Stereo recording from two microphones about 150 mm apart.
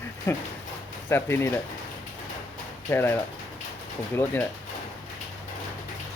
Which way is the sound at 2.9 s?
15° left (ahead or behind).